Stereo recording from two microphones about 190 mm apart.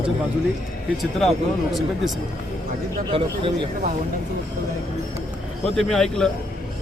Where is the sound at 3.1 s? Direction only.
30° right (ahead or behind).